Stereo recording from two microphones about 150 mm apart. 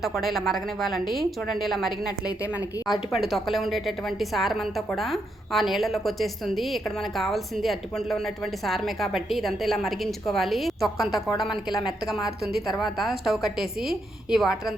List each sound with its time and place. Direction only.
0.0 s a woman's voice: centre (ahead or behind)
2.7 s a woman's voice: 25° left (ahead or behind)
3.1 s a woman's voice: centre (ahead or behind)